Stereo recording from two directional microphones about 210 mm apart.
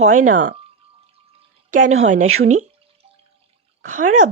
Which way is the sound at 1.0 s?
30° right (ahead or behind).